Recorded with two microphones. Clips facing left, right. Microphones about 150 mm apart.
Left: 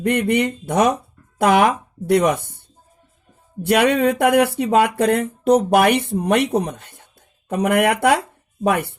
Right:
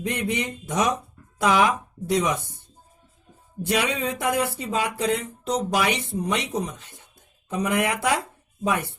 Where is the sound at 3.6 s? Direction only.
60° left (ahead or behind).